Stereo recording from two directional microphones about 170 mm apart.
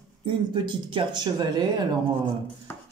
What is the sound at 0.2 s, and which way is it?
Speech, 30° right (ahead or behind).